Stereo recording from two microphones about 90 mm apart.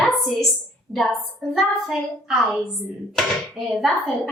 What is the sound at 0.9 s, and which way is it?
Speech, 15° right (ahead or behind).